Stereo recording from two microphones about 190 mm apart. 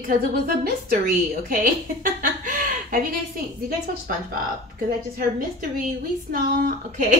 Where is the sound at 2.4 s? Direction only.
45° right (ahead or behind).